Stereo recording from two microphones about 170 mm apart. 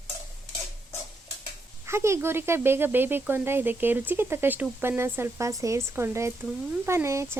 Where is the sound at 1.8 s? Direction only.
15° right (ahead or behind).